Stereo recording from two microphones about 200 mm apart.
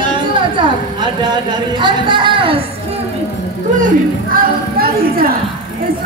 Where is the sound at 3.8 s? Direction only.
45° right (ahead or behind).